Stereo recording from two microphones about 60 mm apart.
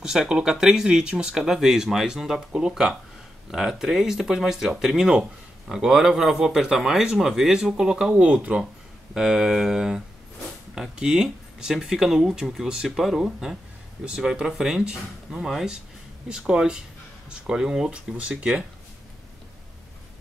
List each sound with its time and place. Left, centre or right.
0.0 s speech: centre
8.1 s speech: right
9.1 s speech: centre